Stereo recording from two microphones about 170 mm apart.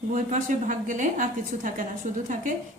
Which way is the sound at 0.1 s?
50° right (ahead or behind).